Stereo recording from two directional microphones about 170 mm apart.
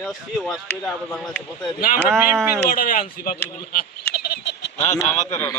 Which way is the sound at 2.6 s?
55° left (ahead or behind).